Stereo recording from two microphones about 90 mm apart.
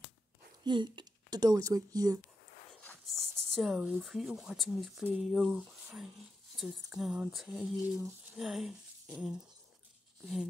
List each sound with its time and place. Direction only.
0.7 s speech: 55° right (ahead or behind)
3.1 s a sound: 5° left (ahead or behind)
3.7 s speech: 5° right (ahead or behind)